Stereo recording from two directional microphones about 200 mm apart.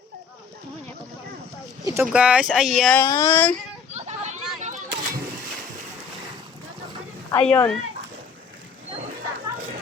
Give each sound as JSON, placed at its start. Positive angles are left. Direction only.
{"t": 1.8, "sound": "speech", "side_deg": -15}
{"t": 3.9, "sound": "a sound", "side_deg": -35}
{"t": 7.3, "sound": "speech", "side_deg": 10}